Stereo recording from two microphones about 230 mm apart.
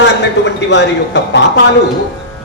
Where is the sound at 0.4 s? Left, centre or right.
Left.